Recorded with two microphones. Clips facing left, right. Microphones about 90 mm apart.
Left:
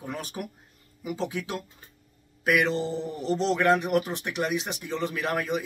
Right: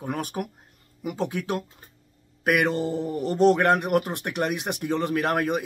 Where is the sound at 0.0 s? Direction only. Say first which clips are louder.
Right 5 dB; 50° right (ahead or behind).